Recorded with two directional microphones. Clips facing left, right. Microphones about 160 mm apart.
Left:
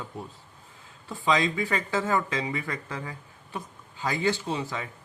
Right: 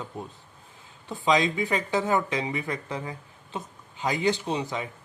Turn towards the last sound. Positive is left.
turn(degrees=-20)  # may be behind; listen again after turning